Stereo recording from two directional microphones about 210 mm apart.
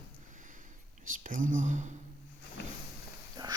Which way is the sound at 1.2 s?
40° right (ahead or behind).